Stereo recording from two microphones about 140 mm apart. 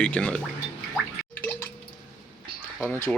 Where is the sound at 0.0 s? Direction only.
10° left (ahead or behind).